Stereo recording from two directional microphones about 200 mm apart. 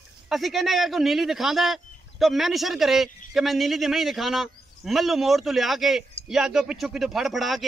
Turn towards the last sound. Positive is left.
turn(degrees=0)  # may be behind; listen again after turning